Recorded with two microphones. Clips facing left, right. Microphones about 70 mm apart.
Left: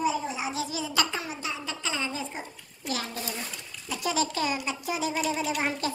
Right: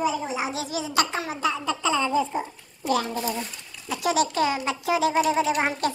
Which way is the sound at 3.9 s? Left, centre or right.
Right.